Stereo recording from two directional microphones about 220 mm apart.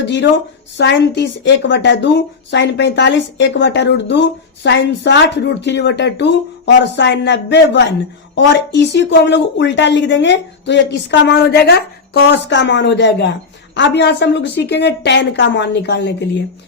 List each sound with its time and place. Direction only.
0.0 s a woman's voice: 55° left (ahead or behind)